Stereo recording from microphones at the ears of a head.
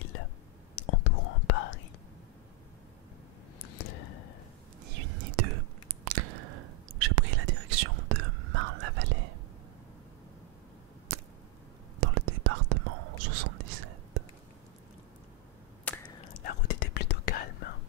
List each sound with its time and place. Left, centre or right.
0.7 s whispering: left
3.6 s a sound: left
4.8 s whispering: right
12.0 s whispering: right
16.2 s whispering: left